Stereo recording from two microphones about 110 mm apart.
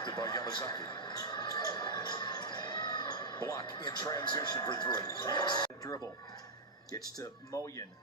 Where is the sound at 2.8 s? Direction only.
40° left (ahead or behind).